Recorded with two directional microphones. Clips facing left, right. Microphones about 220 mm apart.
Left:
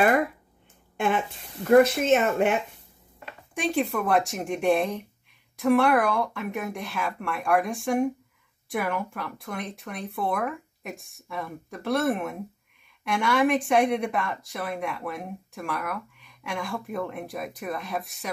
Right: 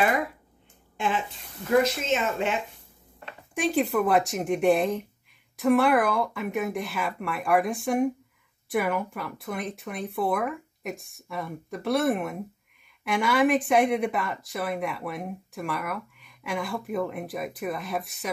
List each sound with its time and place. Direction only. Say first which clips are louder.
0.9 s speech: left 3 dB; 55° left (ahead or behind)
3.5 s speech: right 2 dB; centre (ahead or behind)